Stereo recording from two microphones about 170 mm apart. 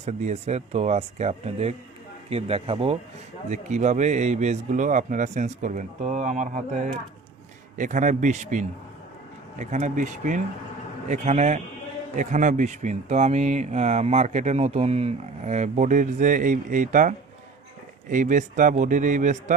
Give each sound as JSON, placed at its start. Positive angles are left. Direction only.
{"t": 0.0, "sound": "speech", "side_deg": -40}
{"t": 3.5, "sound": "speech", "side_deg": -45}